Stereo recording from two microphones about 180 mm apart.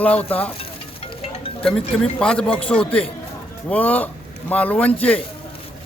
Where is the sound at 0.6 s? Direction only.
30° left (ahead or behind).